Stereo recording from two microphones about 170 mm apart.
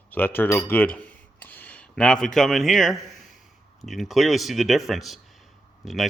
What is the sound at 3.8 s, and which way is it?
Speech, centre (ahead or behind).